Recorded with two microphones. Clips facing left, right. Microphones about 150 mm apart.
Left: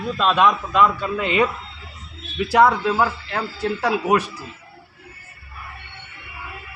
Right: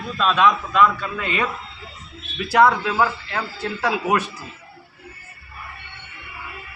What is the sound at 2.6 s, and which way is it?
A man's voice, 5° left (ahead or behind).